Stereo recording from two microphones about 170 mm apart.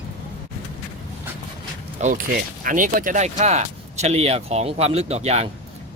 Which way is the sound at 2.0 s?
45° right (ahead or behind).